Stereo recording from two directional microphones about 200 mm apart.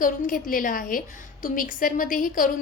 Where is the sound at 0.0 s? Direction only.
40° left (ahead or behind).